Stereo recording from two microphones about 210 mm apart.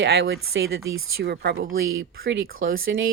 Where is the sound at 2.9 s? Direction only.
50° right (ahead or behind).